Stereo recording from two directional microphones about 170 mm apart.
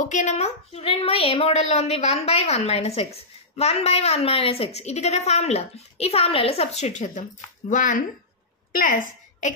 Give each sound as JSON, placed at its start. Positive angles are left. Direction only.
{"t": 0.0, "sound": "a woman's voice", "side_deg": 45}